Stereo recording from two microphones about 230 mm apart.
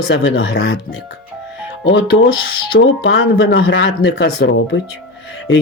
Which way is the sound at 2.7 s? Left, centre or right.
Left.